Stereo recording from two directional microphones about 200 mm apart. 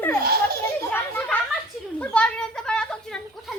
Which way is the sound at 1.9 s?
5° left (ahead or behind).